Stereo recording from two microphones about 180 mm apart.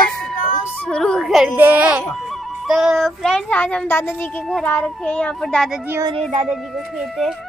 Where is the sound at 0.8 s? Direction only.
5° left (ahead or behind).